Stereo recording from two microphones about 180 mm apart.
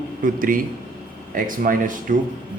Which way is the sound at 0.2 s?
50° right (ahead or behind).